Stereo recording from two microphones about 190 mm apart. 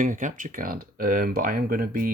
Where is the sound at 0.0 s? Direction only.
45° right (ahead or behind).